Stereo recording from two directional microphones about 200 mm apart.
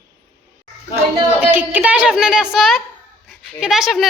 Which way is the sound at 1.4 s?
10° right (ahead or behind).